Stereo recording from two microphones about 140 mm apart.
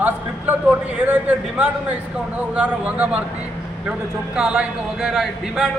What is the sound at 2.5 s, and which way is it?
Speech, 10° right (ahead or behind).